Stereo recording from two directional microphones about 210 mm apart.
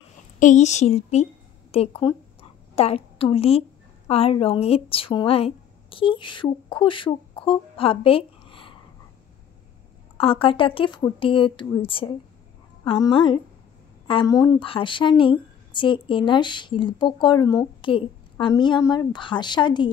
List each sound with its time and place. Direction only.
0.4 s a woman's voice: 35° left (ahead or behind)
10.1 s speech: 25° left (ahead or behind)